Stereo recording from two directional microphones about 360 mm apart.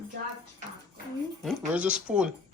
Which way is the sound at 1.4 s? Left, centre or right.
Centre.